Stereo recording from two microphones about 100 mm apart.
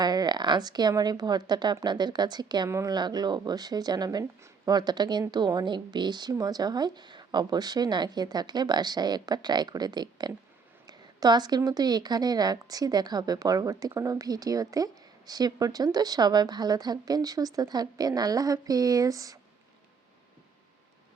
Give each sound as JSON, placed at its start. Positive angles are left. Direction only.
{"t": 0.0, "sound": "speech", "side_deg": -45}
{"t": 2.6, "sound": "speech", "side_deg": -30}
{"t": 2.9, "sound": "speech", "side_deg": -45}